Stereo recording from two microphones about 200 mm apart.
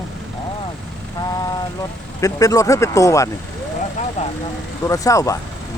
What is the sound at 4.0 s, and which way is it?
Vehicle, 35° left (ahead or behind).